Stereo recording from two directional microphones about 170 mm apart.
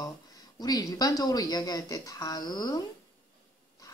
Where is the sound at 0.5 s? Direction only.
20° left (ahead or behind).